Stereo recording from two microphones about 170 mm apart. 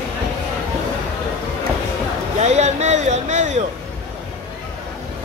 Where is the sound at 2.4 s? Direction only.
40° right (ahead or behind).